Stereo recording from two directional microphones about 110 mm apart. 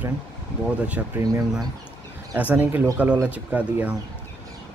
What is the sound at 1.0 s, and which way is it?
Speech, 20° right (ahead or behind).